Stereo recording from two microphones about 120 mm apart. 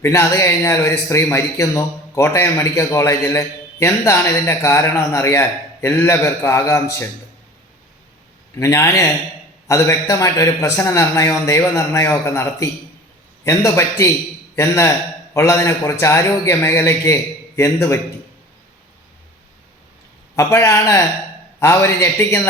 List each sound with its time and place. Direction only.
0.0 s speech: 25° left (ahead or behind)
8.5 s speech: 25° left (ahead or behind)
20.3 s speech: 25° left (ahead or behind)